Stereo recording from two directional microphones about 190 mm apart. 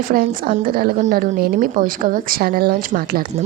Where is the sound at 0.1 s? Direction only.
50° right (ahead or behind).